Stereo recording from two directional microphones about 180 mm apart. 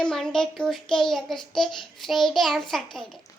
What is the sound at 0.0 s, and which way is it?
A child's voice, 5° left (ahead or behind).